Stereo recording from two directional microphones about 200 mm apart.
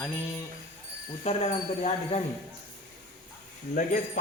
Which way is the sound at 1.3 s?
30° left (ahead or behind).